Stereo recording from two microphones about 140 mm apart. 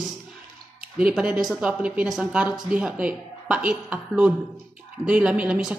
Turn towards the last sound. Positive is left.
turn(degrees=-10)  # may be behind; listen again after turning